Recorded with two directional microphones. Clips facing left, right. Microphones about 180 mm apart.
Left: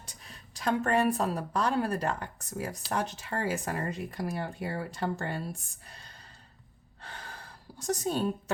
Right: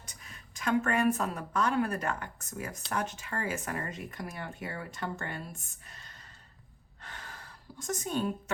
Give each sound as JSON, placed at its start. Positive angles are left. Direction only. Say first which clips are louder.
{"t": 0.3, "sound": "speech", "louder": "left 1 dB", "side_deg": 35}
{"t": 7.0, "sound": "gasp", "louder": "left 2 dB", "side_deg": 35}
{"t": 7.8, "sound": "speech", "louder": "left 3 dB", "side_deg": 35}